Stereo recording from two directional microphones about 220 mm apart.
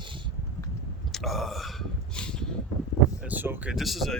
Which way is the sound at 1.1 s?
Centre (ahead or behind).